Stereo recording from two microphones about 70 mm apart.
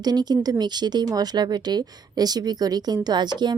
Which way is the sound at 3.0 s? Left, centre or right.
Right.